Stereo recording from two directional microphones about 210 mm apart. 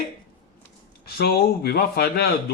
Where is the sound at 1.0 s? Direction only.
45° left (ahead or behind).